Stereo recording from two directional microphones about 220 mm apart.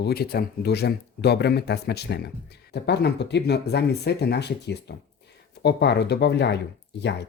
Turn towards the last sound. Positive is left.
turn(degrees=50)  # may be behind; listen again after turning